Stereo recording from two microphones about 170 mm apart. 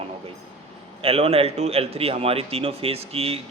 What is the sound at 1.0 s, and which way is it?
Speech, 35° right (ahead or behind).